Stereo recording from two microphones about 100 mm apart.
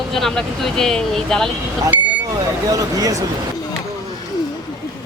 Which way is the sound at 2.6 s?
35° right (ahead or behind).